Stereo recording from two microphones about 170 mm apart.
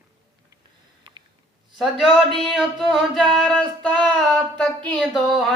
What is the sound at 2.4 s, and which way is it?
Speech, centre (ahead or behind).